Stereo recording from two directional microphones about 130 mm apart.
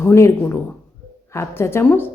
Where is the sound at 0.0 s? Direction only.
20° left (ahead or behind).